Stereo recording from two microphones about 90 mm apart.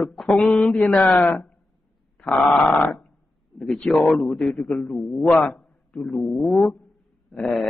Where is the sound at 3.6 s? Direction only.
5° left (ahead or behind).